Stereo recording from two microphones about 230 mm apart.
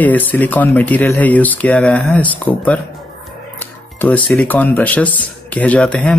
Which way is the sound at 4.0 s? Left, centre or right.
Centre.